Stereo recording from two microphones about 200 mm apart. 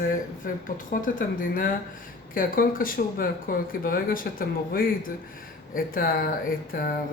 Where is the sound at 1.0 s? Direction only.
40° left (ahead or behind).